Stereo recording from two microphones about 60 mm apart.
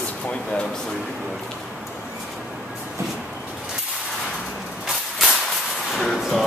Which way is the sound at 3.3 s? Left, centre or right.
Centre.